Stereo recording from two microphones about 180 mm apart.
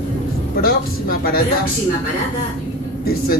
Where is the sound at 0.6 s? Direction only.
55° left (ahead or behind).